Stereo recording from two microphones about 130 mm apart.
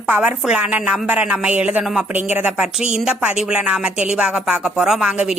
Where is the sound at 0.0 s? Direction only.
10° right (ahead or behind).